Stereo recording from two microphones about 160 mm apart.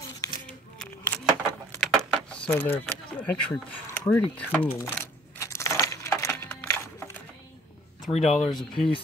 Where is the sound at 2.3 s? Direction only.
10° left (ahead or behind).